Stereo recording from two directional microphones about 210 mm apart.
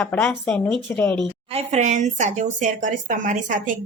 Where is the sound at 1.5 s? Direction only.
35° right (ahead or behind).